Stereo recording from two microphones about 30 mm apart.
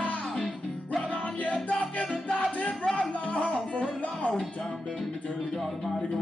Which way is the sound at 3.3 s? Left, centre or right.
Left.